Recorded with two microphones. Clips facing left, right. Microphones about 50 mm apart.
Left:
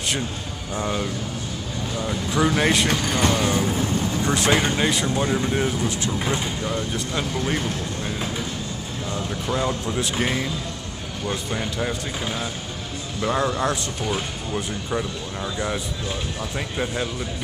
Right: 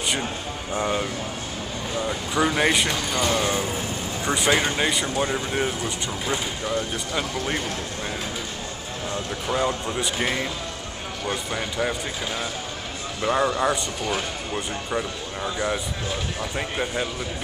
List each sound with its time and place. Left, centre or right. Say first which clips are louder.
0.7 s speech: even; centre
2.9 s speech: left 3 dB; left
3.3 s speech: left 2 dB; centre
4.2 s speech: even; centre
9.5 s speech: right 1 dB; centre
16.8 s speech: left 2 dB; centre